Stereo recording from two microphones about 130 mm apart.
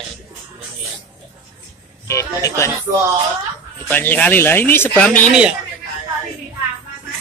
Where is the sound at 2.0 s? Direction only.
25° left (ahead or behind).